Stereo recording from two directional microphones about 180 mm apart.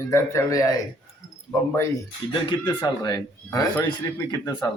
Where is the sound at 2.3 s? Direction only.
30° left (ahead or behind).